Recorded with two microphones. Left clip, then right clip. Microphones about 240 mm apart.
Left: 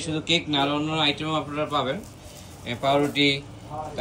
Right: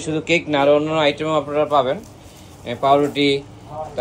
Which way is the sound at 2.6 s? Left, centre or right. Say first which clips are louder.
Right 7 dB; right.